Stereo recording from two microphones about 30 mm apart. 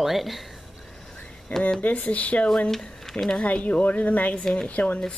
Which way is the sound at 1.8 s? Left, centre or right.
Left.